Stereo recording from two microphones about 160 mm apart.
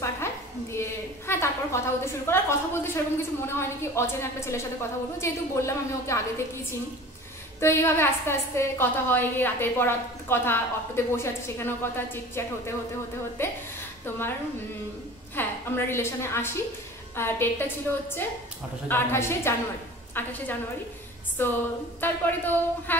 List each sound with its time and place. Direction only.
0.0 s a woman's voice: 15° left (ahead or behind)
7.6 s a woman's voice: 15° left (ahead or behind)
15.3 s a woman's voice: 15° left (ahead or behind)
18.9 s a woman's voice: 15° left (ahead or behind)